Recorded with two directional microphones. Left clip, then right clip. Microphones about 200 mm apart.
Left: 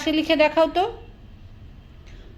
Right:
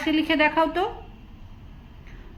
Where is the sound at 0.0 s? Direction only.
35° left (ahead or behind).